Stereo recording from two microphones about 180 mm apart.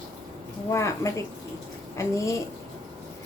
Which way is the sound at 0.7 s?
15° left (ahead or behind).